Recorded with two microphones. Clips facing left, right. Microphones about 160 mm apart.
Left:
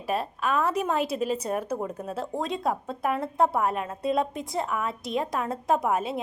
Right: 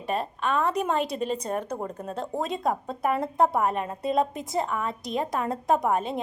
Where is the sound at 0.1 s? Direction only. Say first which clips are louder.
Even; 5° left (ahead or behind).